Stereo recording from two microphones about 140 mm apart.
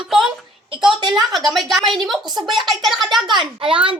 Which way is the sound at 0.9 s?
30° right (ahead or behind).